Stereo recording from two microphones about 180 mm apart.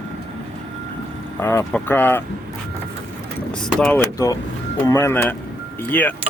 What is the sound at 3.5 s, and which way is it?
Speech, 5° left (ahead or behind).